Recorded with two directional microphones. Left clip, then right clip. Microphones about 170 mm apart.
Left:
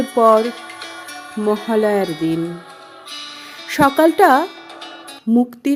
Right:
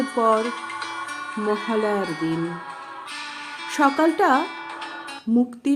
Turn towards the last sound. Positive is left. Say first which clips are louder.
# left 4 dB
turn(degrees=45)  # may be behind; listen again after turning